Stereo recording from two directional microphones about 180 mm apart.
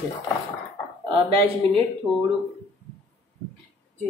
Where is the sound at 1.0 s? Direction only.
30° right (ahead or behind).